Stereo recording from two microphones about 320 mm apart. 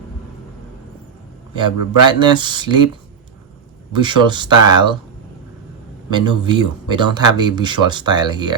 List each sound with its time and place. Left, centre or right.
1.5 s speech: centre
3.9 s speech: centre
6.1 s speech: centre